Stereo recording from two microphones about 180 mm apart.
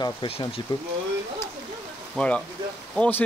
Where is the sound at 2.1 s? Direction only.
5° left (ahead or behind).